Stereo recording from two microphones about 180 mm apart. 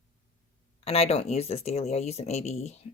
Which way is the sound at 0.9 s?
35° left (ahead or behind).